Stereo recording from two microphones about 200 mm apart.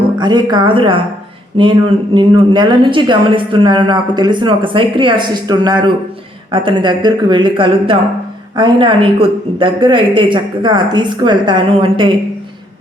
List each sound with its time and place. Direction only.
0.2 s a woman's voice: 20° right (ahead or behind)